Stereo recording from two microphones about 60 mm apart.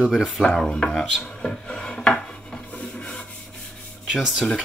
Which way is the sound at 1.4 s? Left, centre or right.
Centre.